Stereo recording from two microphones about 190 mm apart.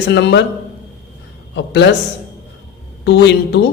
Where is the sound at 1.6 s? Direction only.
65° left (ahead or behind).